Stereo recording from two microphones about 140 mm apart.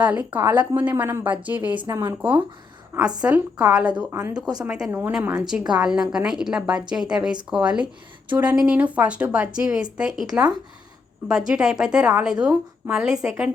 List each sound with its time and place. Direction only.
0.0 s a woman's voice: 10° right (ahead or behind)
4.9 s speech: 15° right (ahead or behind)
5.4 s a woman's voice: 5° right (ahead or behind)